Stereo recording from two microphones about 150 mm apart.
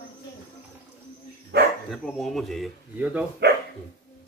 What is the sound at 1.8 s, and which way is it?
Speech, centre (ahead or behind).